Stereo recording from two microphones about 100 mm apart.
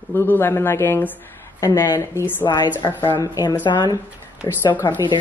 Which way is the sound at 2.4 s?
45° left (ahead or behind).